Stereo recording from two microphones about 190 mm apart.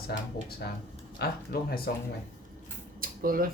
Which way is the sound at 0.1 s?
60° left (ahead or behind).